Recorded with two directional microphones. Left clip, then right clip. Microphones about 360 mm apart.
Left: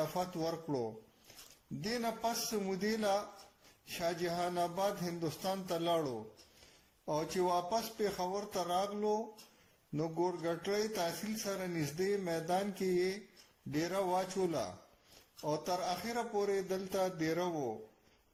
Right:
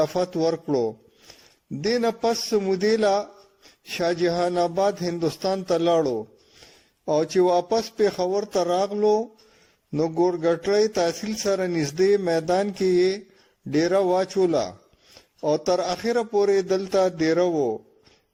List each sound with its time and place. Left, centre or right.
0.0 s speech: right